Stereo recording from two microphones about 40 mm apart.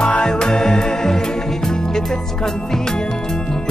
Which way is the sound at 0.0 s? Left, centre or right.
Left.